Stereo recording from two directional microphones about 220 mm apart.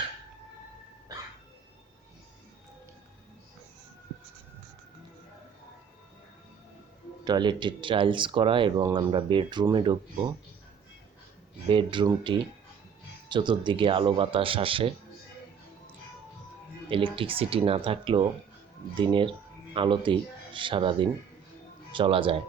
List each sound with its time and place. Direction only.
7.3 s speech: 20° right (ahead or behind)
11.7 s speech: 20° right (ahead or behind)
16.9 s speech: 25° right (ahead or behind)